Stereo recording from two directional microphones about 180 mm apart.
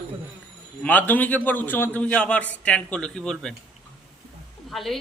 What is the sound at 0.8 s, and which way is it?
A man's voice, 10° left (ahead or behind).